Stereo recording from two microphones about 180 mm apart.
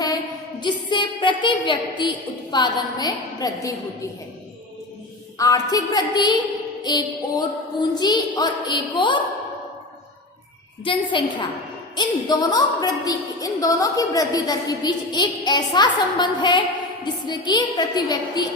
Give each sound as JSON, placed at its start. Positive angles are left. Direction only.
{"t": 0.6, "sound": "a woman's voice", "side_deg": 25}
{"t": 5.4, "sound": "a woman's voice", "side_deg": 20}
{"t": 10.8, "sound": "a woman's voice", "side_deg": 30}